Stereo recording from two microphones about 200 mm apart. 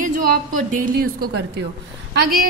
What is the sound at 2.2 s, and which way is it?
Speech, 45° right (ahead or behind).